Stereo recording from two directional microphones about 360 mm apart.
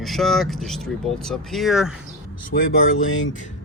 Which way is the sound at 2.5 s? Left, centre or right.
Left.